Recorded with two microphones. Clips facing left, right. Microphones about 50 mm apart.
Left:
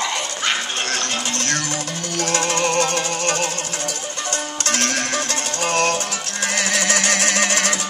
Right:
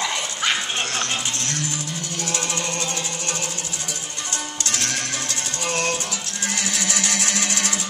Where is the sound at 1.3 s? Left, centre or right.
Left.